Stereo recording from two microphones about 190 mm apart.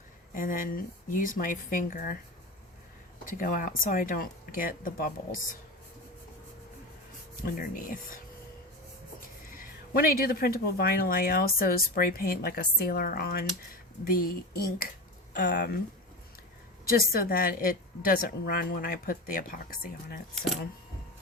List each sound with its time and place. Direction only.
0.3 s speech: 45° left (ahead or behind)
3.2 s speech: 45° left (ahead or behind)
7.4 s speech: 50° left (ahead or behind)
9.5 s speech: 45° left (ahead or behind)
15.4 s speech: 60° left (ahead or behind)
17.1 s speech: 50° left (ahead or behind)